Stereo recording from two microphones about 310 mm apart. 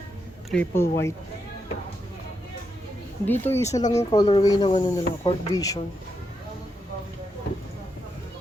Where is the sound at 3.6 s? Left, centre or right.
Left.